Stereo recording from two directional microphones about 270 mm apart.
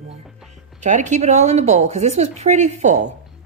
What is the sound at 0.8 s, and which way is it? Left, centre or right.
Speech, right.